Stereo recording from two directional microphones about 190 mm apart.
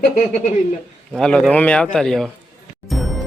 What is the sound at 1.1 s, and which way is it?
A man's voice, 5° left (ahead or behind).